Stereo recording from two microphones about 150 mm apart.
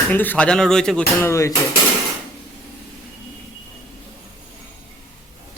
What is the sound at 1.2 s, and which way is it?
Hammer, 20° left (ahead or behind).